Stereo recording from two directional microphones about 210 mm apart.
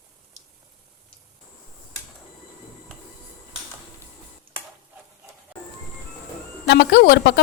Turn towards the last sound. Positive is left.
turn(degrees=50)  # may be behind; listen again after turning